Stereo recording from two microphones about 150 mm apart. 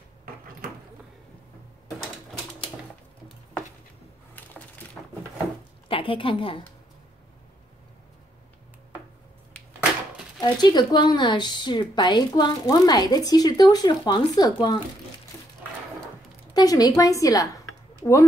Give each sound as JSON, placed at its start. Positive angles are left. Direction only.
{"t": 5.0, "sound": "a sound", "side_deg": 10}
{"t": 5.9, "sound": "a woman's voice", "side_deg": 35}
{"t": 10.4, "sound": "a woman's voice", "side_deg": 30}
{"t": 16.5, "sound": "a woman's voice", "side_deg": 25}